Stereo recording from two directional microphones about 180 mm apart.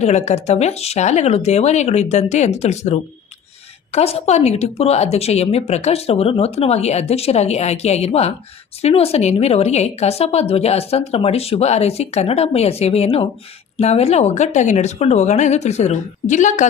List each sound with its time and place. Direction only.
0.0 s a woman's voice: 40° left (ahead or behind)